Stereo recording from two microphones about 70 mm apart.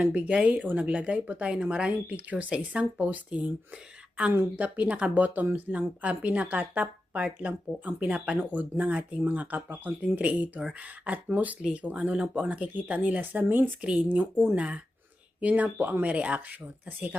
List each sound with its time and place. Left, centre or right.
0.0 s speech: right